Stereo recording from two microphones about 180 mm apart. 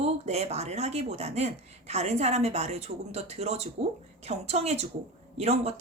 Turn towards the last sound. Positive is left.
turn(degrees=-35)  # may be behind; listen again after turning